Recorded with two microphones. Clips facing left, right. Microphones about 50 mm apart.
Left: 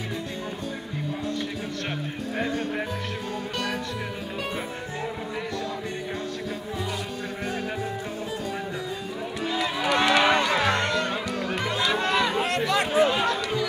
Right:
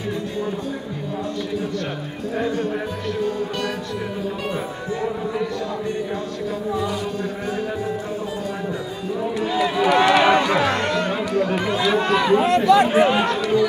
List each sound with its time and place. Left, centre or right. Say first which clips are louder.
9.4 s run: right 6 dB; centre
12.6 s speech: right 8 dB; centre
13.0 s speech: right 4 dB; right
13.4 s chatter: right 9 dB; centre